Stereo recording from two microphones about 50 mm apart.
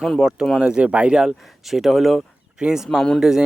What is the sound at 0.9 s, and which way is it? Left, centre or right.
Speech, right.